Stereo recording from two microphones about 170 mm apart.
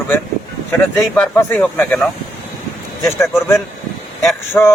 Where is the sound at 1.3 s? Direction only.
10° left (ahead or behind).